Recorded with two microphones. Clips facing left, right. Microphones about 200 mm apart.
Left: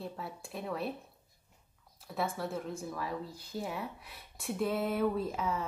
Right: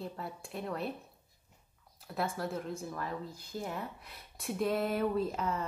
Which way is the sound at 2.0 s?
Centre (ahead or behind).